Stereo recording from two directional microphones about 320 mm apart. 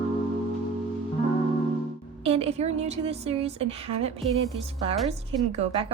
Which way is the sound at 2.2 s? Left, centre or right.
Centre.